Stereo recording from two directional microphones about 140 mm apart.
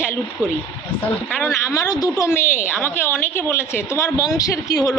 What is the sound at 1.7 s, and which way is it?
A woman's voice, 25° left (ahead or behind).